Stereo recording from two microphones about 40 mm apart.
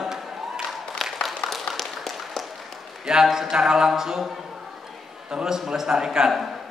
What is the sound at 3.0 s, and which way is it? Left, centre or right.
A man's voice, centre.